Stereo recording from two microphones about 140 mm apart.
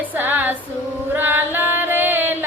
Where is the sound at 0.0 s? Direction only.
15° right (ahead or behind).